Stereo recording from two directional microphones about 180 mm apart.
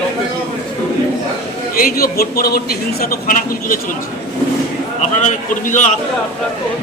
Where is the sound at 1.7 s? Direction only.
55° left (ahead or behind).